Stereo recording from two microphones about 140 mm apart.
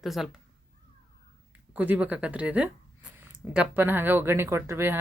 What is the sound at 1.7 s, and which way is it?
Speech, 10° right (ahead or behind).